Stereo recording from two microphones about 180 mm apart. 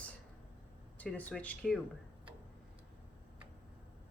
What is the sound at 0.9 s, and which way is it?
Speech, 10° left (ahead or behind).